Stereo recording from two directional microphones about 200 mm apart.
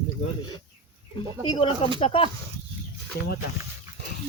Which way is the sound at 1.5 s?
25° left (ahead or behind).